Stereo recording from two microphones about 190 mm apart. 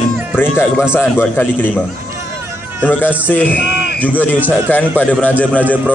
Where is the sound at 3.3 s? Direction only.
10° left (ahead or behind).